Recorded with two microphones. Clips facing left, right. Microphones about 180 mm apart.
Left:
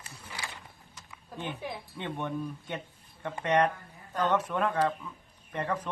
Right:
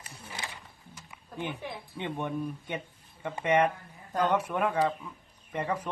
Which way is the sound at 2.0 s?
15° right (ahead or behind).